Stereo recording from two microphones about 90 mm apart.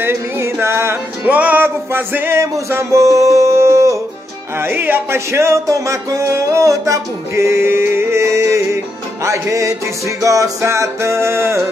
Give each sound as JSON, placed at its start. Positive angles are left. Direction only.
{"t": 0.0, "sound": "music", "side_deg": -30}
{"t": 1.2, "sound": "music", "side_deg": -15}
{"t": 2.7, "sound": "a sound", "side_deg": -35}
{"t": 4.6, "sound": "speech", "side_deg": -25}